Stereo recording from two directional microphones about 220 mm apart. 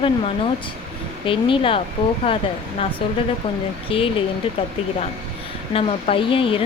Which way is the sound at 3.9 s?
25° left (ahead or behind).